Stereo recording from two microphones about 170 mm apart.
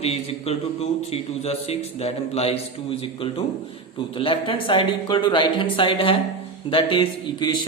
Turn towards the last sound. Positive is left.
turn(degrees=25)  # may be behind; listen again after turning